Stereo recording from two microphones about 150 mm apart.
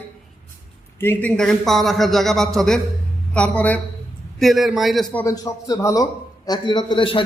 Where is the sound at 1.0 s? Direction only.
15° left (ahead or behind).